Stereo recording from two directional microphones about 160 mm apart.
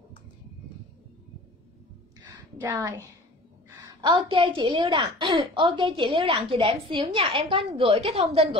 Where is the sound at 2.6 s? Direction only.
20° right (ahead or behind).